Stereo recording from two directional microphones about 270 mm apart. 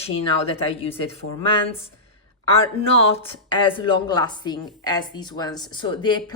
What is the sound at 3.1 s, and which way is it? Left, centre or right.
Speech, centre.